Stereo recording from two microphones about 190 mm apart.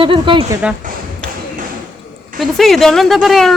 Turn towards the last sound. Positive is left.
turn(degrees=0)  # may be behind; listen again after turning